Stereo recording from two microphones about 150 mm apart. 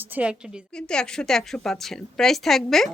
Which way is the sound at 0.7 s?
5° left (ahead or behind).